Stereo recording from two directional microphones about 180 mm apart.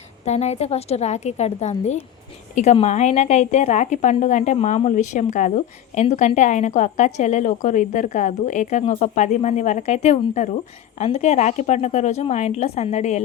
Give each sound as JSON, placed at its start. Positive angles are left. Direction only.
{"t": 0.3, "sound": "a woman's voice", "side_deg": 40}